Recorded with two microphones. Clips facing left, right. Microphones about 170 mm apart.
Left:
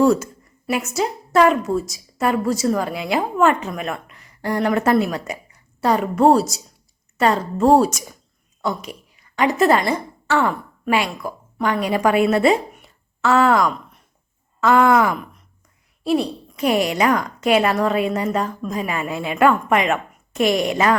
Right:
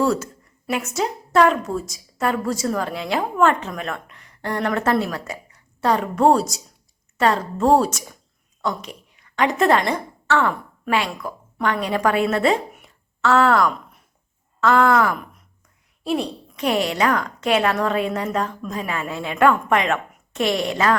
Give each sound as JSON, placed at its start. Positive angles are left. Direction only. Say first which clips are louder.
{"t": 0.0, "sound": "a woman's voice", "louder": "left 5 dB", "side_deg": 15}
{"t": 0.7, "sound": "a woman's voice", "louder": "left 2 dB", "side_deg": 5}
{"t": 5.8, "sound": "a woman's voice", "louder": "left 2 dB", "side_deg": 5}
{"t": 16.0, "sound": "a woman's voice", "louder": "left 4 dB", "side_deg": 0}